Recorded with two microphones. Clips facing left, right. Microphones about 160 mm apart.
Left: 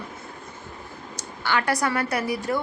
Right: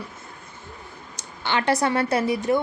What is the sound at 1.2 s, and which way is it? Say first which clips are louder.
Speech: even; 20° right (ahead or behind).